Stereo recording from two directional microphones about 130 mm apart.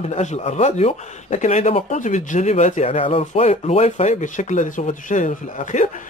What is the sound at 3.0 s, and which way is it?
Speech, 45° left (ahead or behind).